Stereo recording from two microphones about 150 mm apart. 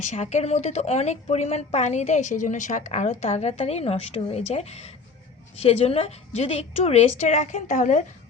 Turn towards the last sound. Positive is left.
turn(degrees=55)  # may be behind; listen again after turning